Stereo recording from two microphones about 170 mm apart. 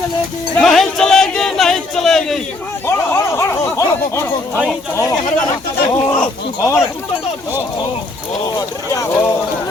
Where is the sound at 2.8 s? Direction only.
15° left (ahead or behind).